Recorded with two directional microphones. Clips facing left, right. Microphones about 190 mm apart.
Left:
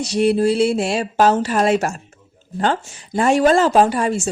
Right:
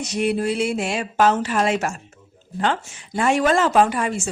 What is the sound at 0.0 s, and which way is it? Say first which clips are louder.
Speech: left 6 dB; 30° left (ahead or behind).